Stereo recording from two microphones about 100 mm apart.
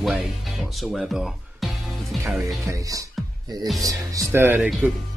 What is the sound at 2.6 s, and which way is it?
Speech, 35° right (ahead or behind).